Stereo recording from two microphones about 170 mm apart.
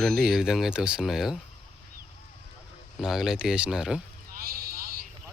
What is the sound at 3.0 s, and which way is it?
Speech, centre (ahead or behind).